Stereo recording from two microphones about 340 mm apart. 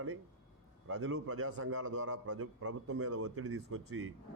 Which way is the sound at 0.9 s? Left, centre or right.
Right.